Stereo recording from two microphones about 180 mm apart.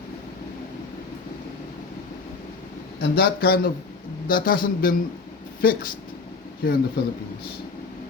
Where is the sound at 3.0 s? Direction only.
60° left (ahead or behind).